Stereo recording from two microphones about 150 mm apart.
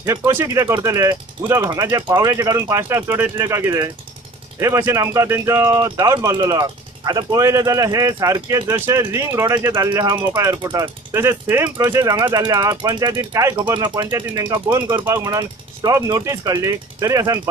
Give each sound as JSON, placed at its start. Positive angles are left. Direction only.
{"t": 0.0, "sound": "speech", "side_deg": -15}